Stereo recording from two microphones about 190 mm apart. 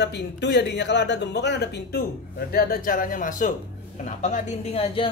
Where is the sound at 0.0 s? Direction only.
65° left (ahead or behind).